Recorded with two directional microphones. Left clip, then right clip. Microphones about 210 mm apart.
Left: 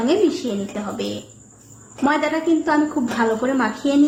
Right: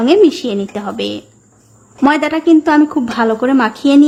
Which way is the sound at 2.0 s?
45° right (ahead or behind).